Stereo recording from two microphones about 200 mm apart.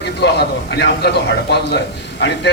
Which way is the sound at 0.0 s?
55° left (ahead or behind).